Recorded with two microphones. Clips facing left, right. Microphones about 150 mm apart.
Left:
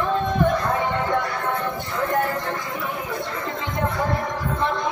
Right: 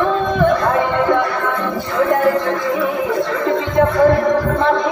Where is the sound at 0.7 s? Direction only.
80° right.